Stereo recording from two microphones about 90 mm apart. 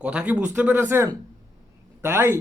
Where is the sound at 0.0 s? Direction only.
15° right (ahead or behind).